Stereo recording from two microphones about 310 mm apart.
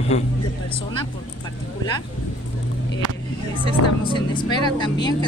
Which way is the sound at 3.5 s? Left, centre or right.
Centre.